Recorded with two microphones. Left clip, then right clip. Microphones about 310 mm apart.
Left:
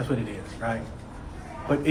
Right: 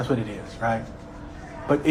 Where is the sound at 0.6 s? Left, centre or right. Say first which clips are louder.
Right 5 dB; centre.